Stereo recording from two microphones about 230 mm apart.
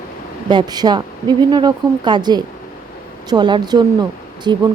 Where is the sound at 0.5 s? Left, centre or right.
Centre.